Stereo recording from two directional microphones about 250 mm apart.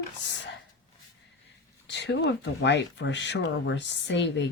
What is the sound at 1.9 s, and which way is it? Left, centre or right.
Speech, left.